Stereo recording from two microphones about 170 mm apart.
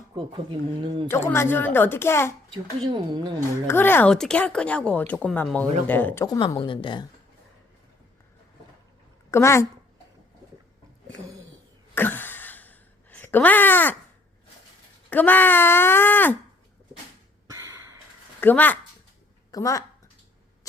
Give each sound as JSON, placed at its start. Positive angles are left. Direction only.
{"t": 1.1, "sound": "speech", "side_deg": 15}
{"t": 2.5, "sound": "a woman's voice", "side_deg": -25}
{"t": 3.7, "sound": "speech", "side_deg": 10}
{"t": 6.2, "sound": "a woman's voice", "side_deg": 20}
{"t": 9.3, "sound": "speech", "side_deg": 15}
{"t": 11.9, "sound": "a sound", "side_deg": 10}
{"t": 15.1, "sound": "speech", "side_deg": 10}
{"t": 17.5, "sound": "a sound", "side_deg": -15}
{"t": 18.3, "sound": "speech", "side_deg": 10}
{"t": 19.5, "sound": "speech", "side_deg": 20}